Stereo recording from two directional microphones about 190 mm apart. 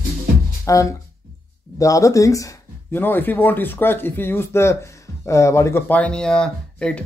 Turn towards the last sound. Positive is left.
turn(degrees=5)  # may be behind; listen again after turning